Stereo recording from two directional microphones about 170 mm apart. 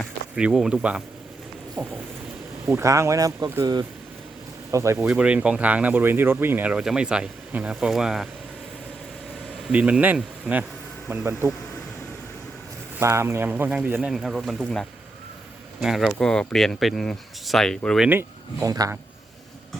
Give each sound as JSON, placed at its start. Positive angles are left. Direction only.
{"t": 0.0, "sound": "speech", "side_deg": -5}
{"t": 2.6, "sound": "speech", "side_deg": -15}
{"t": 4.9, "sound": "speech", "side_deg": -5}
{"t": 9.7, "sound": "speech", "side_deg": -5}
{"t": 13.0, "sound": "speech", "side_deg": -15}
{"t": 18.1, "sound": "speech", "side_deg": -15}